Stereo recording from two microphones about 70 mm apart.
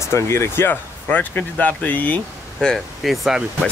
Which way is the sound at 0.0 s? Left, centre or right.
Left.